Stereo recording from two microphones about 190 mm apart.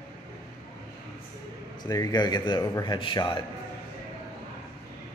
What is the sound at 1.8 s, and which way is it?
A man's voice, 20° left (ahead or behind).